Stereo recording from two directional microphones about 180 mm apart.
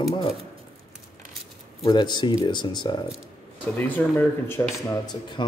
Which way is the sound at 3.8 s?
10° left (ahead or behind).